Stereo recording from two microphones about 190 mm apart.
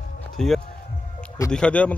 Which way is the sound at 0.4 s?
Centre (ahead or behind).